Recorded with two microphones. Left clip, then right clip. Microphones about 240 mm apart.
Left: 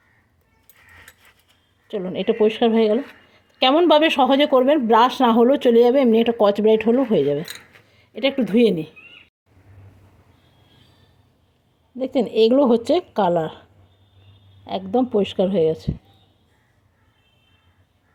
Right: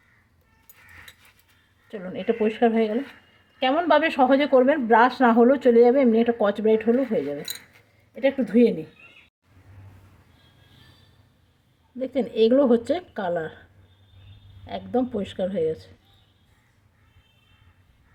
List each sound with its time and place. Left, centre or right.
1.9 s speech: left
11.9 s speech: centre
14.7 s speech: left